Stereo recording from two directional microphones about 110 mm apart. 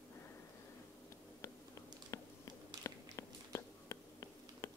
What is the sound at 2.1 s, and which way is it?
Biting, 30° left (ahead or behind).